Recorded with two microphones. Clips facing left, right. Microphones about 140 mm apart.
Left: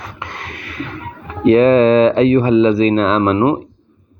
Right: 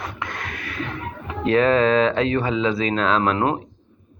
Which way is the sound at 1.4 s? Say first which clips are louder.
Left 8 dB; 20° left (ahead or behind).